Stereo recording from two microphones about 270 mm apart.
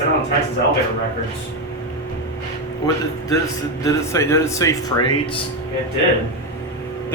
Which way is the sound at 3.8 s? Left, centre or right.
Centre.